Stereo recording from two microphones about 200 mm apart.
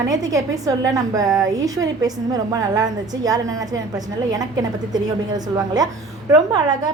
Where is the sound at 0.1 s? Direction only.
15° right (ahead or behind).